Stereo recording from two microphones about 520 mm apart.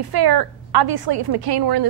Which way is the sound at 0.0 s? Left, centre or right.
Right.